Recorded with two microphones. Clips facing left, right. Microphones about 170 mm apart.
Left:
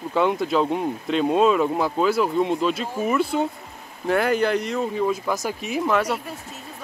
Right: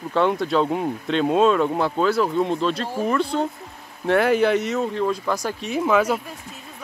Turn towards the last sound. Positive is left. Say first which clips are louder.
# right 2 dB
turn(degrees=-5)  # may be behind; listen again after turning